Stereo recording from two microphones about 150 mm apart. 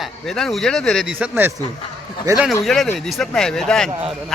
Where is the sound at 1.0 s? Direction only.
5° right (ahead or behind).